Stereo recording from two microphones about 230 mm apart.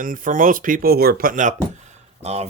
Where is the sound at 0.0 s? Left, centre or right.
Right.